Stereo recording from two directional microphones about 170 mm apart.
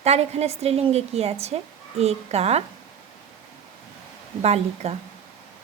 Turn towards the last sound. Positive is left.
turn(degrees=-40)  # may be behind; listen again after turning